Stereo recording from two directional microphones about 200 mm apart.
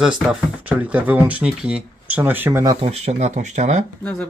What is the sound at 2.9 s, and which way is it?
Speech, 35° right (ahead or behind).